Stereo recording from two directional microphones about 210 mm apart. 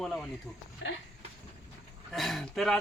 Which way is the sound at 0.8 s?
65° left (ahead or behind).